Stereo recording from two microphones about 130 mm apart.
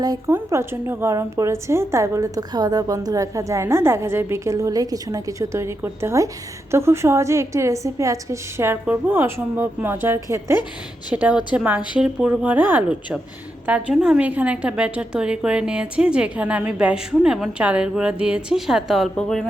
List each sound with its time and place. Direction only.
0.0 s a woman's voice: 30° right (ahead or behind)
0.3 s a woman's voice: 20° right (ahead or behind); by 19.5 s centre (ahead or behind)